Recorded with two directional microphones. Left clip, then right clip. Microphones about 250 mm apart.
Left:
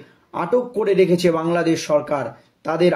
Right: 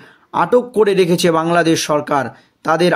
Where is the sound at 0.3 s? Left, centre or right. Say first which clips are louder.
Right 6 dB; right.